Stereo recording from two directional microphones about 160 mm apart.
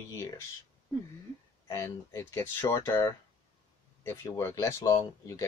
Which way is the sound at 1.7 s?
15° left (ahead or behind).